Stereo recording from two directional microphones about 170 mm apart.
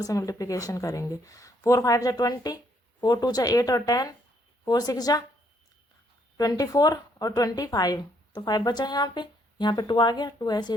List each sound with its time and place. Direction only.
0.0 s speech: 20° left (ahead or behind)
6.3 s speech: 20° left (ahead or behind)